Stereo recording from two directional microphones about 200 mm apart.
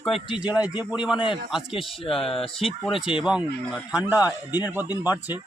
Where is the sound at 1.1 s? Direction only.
25° left (ahead or behind).